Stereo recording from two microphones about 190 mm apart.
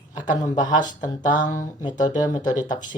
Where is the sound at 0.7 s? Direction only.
40° left (ahead or behind).